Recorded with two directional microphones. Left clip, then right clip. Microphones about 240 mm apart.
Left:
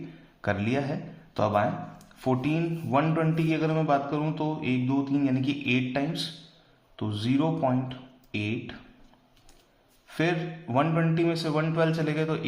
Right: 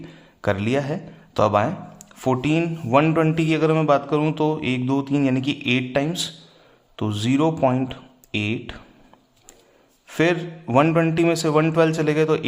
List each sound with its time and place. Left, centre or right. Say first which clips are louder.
0.4 s speech: right 6 dB; right
10.1 s speech: right 7 dB; right